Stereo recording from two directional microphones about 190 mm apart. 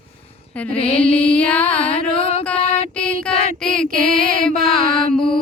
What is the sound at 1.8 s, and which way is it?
Music, 30° left (ahead or behind).